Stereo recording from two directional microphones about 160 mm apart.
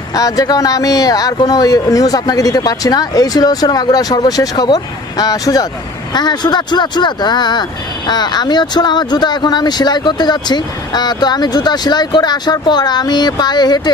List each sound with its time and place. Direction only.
0.1 s speech: 25° left (ahead or behind)